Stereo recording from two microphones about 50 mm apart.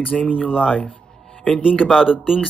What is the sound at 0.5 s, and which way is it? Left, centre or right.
Speech, centre.